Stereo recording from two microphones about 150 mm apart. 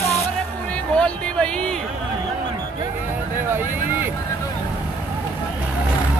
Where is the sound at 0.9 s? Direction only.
5° left (ahead or behind).